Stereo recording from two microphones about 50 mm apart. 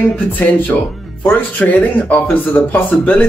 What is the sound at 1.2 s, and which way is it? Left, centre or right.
Speech, left.